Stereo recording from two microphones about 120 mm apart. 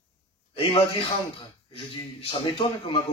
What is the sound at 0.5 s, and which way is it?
A man's voice, 50° left (ahead or behind).